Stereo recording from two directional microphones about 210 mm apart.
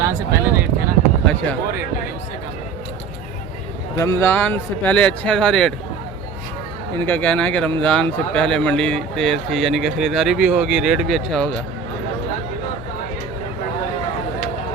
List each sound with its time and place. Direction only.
0.0 s speech: 10° right (ahead or behind)
3.9 s speech: 15° left (ahead or behind)
6.9 s speech: 10° left (ahead or behind)